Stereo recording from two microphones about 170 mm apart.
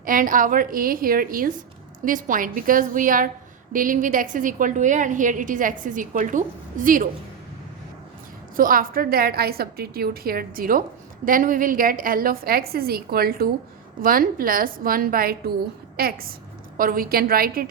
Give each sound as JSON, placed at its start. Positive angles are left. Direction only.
{"t": 0.0, "sound": "a woman's voice", "side_deg": -55}
{"t": 8.5, "sound": "a woman's voice", "side_deg": -55}